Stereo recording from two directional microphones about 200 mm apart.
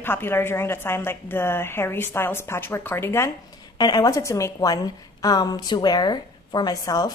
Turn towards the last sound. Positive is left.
turn(degrees=20)  # may be behind; listen again after turning